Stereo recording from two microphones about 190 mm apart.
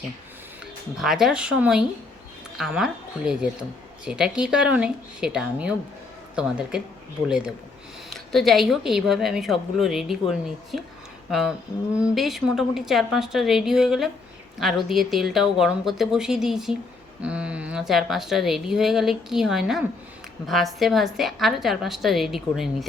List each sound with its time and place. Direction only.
0.9 s speech: centre (ahead or behind)